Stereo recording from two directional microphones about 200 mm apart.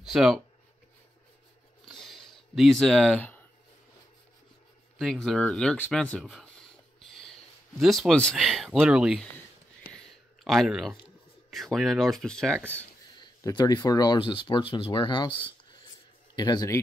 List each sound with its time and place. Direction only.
0.0 s speech: centre (ahead or behind)
1.9 s a sound: centre (ahead or behind)
4.9 s speech: centre (ahead or behind)
7.0 s a sound: centre (ahead or behind)
7.8 s speech: centre (ahead or behind)
10.4 s speech: centre (ahead or behind)
13.2 s speech: 20° left (ahead or behind)